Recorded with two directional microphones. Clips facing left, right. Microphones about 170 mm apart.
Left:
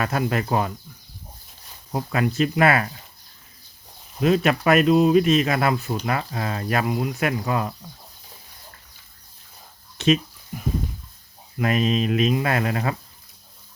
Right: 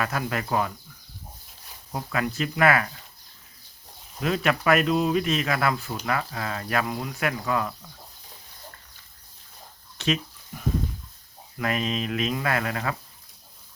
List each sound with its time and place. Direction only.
0.0 s speech: 25° left (ahead or behind)
1.9 s speech: 25° left (ahead or behind)
4.2 s speech: 25° left (ahead or behind)
6.8 s speech: 15° left (ahead or behind)
10.0 s a sound: 20° left (ahead or behind)
11.5 s speech: 20° left (ahead or behind)